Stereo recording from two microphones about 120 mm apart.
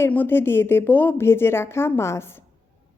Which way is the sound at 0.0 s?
15° left (ahead or behind).